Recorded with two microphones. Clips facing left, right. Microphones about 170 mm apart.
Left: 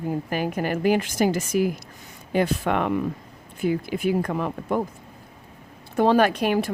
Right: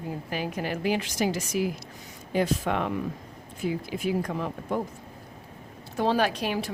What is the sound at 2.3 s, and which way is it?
Speech, 65° left (ahead or behind).